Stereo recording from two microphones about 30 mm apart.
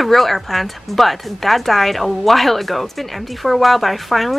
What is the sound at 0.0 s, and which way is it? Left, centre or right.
Speech, centre.